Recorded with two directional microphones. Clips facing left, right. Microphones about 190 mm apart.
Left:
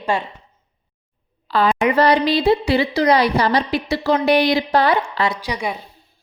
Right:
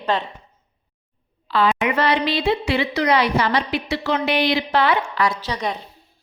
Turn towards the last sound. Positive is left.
turn(degrees=10)  # may be behind; listen again after turning